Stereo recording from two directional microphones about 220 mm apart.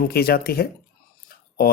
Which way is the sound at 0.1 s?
45° left (ahead or behind).